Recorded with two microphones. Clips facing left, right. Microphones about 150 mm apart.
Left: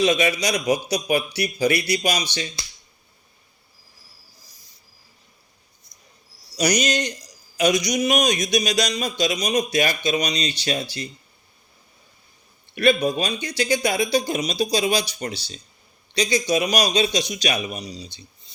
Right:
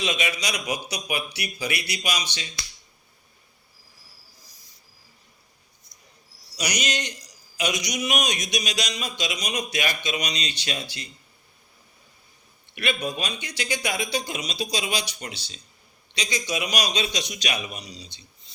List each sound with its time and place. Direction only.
0.0 s speech: 40° left (ahead or behind)
6.6 s a man's voice: 45° left (ahead or behind)
12.7 s speech: 40° left (ahead or behind)